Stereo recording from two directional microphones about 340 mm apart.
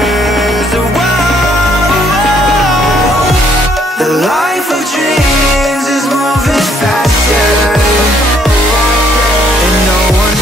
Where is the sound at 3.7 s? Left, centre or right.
Centre.